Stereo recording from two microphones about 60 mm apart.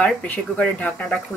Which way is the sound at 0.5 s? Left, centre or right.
Left.